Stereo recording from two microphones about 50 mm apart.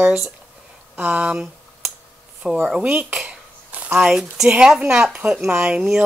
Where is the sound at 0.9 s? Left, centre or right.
Right.